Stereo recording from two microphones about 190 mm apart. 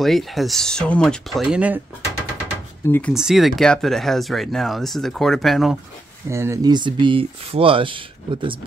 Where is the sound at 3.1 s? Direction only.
Centre (ahead or behind).